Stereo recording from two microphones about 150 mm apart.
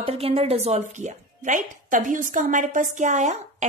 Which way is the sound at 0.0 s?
40° right (ahead or behind).